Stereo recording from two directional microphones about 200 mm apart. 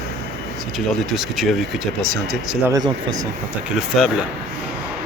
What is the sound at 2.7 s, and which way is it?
Speech, 20° right (ahead or behind).